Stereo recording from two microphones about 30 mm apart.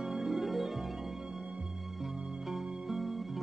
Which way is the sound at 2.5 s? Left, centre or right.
Centre.